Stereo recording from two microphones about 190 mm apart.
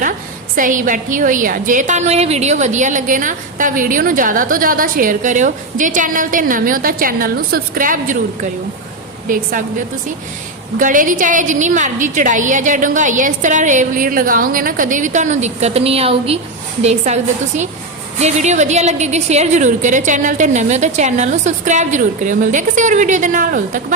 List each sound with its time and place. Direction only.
0.5 s a woman's voice: 45° right (ahead or behind)
9.3 s a woman's voice: 45° right (ahead or behind)
10.8 s a woman's voice: 45° right (ahead or behind)
18.2 s a woman's voice: 35° right (ahead or behind)